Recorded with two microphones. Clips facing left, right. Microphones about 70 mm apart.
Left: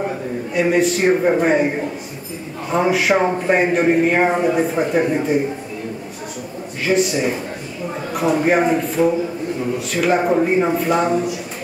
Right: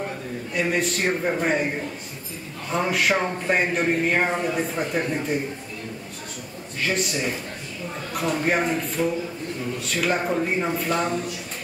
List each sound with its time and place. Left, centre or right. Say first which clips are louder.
0.6 s a man's voice: left 8 dB; centre
1.1 s speech: left 7 dB; centre
6.8 s a man's voice: left 8 dB; centre